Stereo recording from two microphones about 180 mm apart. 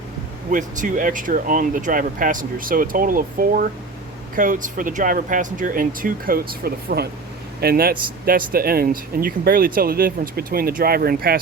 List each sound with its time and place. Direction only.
0.5 s speech: 45° right (ahead or behind)